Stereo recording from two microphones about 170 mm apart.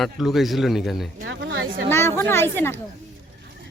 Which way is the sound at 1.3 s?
90° right.